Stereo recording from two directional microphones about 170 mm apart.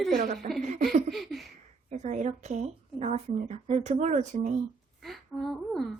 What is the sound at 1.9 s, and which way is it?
A woman's voice, 45° right (ahead or behind).